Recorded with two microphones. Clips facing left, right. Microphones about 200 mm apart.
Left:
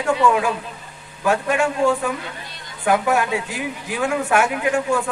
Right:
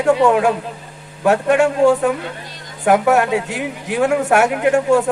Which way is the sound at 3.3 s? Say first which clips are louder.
Right 5 dB; 65° right (ahead or behind).